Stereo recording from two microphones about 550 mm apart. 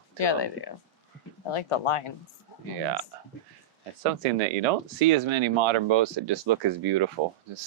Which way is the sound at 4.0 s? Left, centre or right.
Right.